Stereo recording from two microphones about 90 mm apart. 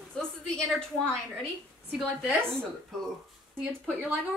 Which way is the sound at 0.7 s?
10° left (ahead or behind).